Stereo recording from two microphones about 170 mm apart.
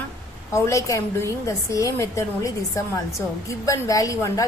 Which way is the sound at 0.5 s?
15° left (ahead or behind).